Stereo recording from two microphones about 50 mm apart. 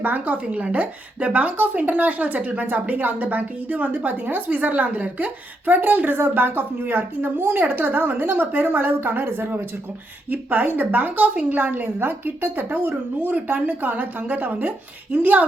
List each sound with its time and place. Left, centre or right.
0.0 s speech: right